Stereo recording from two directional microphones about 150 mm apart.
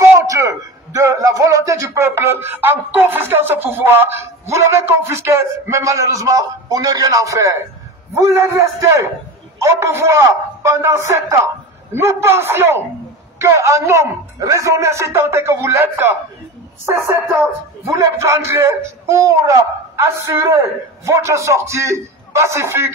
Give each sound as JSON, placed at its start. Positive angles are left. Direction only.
{"t": 0.2, "sound": "a man's voice", "side_deg": -20}